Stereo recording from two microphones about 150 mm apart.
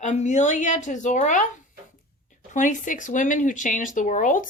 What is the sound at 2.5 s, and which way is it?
Speech, 55° left (ahead or behind).